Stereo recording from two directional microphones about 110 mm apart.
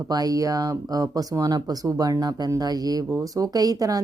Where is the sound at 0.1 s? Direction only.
35° right (ahead or behind).